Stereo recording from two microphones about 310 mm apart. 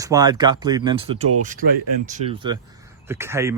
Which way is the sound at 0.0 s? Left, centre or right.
Centre.